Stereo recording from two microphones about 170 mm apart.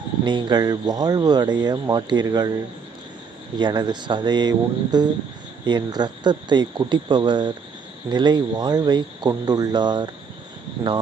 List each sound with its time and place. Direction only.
0.3 s speech: 25° right (ahead or behind)
3.6 s speech: 25° right (ahead or behind)